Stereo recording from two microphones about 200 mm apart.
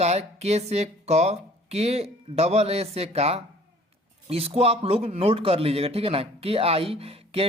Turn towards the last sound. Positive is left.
turn(degrees=-30)  # may be behind; listen again after turning